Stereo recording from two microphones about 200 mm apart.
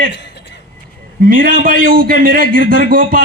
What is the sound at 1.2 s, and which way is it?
A man's voice, 45° right (ahead or behind).